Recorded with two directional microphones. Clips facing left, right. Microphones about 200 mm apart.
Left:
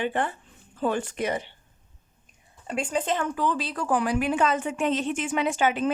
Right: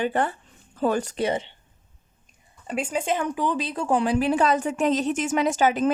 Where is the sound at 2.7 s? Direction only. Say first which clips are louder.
Right 1 dB; 5° right (ahead or behind).